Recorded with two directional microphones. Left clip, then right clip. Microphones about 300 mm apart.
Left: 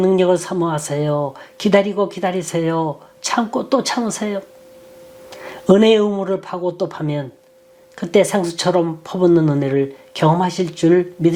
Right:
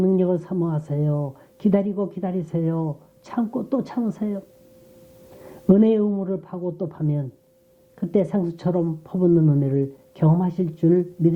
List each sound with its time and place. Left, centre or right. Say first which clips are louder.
0.0 s speech: left 7 dB; centre
1.5 s speech: left 8 dB; centre
5.3 s a sound: left 11 dB; centre
5.7 s speech: left 7 dB; centre